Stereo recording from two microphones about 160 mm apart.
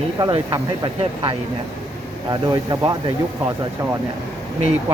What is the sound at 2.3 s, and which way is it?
Speech, 25° right (ahead or behind).